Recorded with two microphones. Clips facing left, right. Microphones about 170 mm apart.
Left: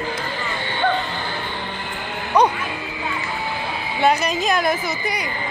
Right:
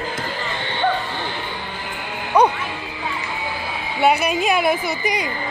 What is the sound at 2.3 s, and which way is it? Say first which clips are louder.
Music: right 1 dB; 10° right (ahead or behind).